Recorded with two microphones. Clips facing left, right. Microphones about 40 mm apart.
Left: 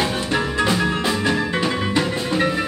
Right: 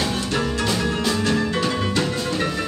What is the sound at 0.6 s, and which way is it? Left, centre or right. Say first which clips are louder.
Music: left 2 dB; centre.